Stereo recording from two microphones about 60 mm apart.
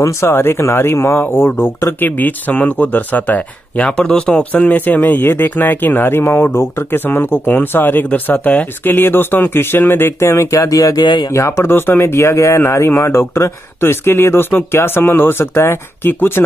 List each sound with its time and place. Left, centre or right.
0.0 s speech: left
8.9 s speech: left